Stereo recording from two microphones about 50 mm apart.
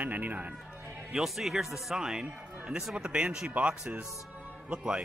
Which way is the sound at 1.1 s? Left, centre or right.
Centre.